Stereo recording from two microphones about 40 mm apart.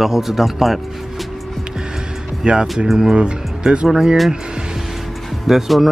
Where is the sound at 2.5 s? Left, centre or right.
Right.